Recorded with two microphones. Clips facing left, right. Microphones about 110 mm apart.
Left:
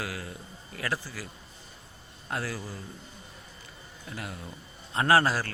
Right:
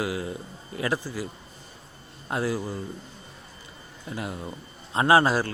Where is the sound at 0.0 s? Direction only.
20° right (ahead or behind).